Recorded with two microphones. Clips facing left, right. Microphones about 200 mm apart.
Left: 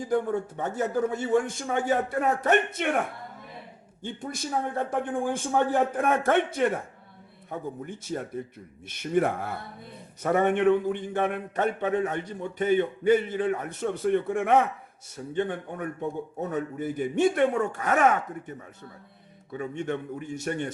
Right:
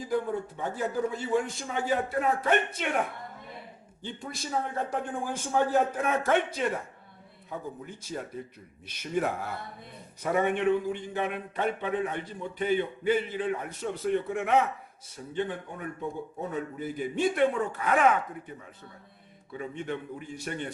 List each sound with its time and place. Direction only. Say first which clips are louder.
0.1 s speech: left 3 dB; 50° left (ahead or behind)
4.0 s a man's voice: left 4 dB; 50° left (ahead or behind)
19.5 s speech: left 4 dB; 45° left (ahead or behind)